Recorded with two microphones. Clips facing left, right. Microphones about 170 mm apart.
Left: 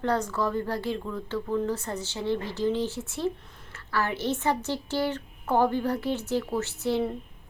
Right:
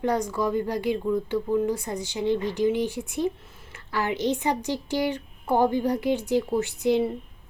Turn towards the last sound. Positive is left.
turn(degrees=-15)  # may be behind; listen again after turning